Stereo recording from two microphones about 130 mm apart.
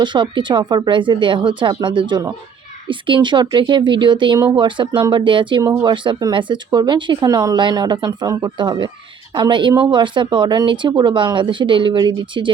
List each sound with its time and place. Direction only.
0.0 s speech: 35° right (ahead or behind)
4.9 s speech: 25° right (ahead or behind)
5.1 s speech: 40° right (ahead or behind)